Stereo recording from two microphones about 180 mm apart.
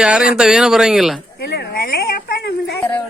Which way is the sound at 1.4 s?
65° left (ahead or behind).